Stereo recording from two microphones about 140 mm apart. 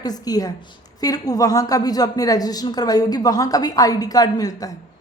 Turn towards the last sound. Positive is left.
turn(degrees=25)  # may be behind; listen again after turning